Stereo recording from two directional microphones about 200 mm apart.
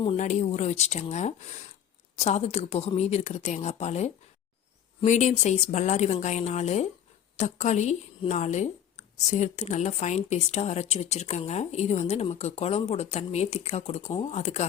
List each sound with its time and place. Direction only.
0.0 s speech: 30° left (ahead or behind)